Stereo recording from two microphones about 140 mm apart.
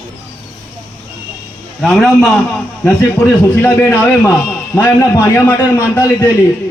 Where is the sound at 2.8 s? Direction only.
15° left (ahead or behind).